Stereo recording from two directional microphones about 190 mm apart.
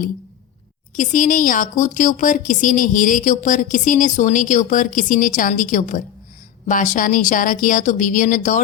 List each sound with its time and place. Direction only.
0.9 s speech: 45° left (ahead or behind)